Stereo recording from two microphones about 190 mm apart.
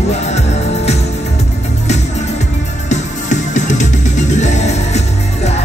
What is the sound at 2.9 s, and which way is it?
Music, 40° left (ahead or behind).